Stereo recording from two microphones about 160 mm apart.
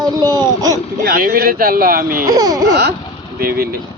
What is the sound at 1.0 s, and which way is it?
Speech, 65° right (ahead or behind).